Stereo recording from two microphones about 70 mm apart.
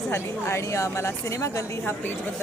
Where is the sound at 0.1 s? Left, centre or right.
Left.